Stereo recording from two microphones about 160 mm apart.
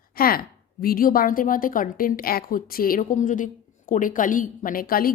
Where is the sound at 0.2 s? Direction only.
65° left (ahead or behind).